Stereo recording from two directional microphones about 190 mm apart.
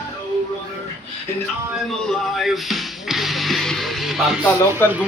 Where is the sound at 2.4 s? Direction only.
Centre (ahead or behind).